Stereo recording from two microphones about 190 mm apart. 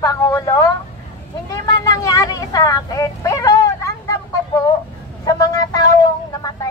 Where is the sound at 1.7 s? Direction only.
20° left (ahead or behind).